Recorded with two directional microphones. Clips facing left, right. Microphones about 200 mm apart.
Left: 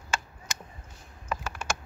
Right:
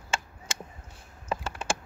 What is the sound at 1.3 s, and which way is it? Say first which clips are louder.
Computer keyboard: right 2 dB; 30° right (ahead or behind).